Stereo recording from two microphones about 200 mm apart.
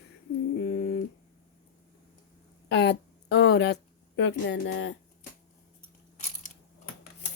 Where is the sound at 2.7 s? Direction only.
60° left (ahead or behind).